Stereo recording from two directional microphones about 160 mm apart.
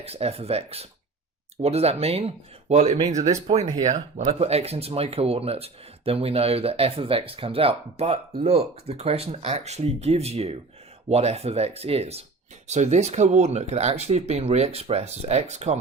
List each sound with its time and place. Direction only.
0.0 s speech: 40° right (ahead or behind)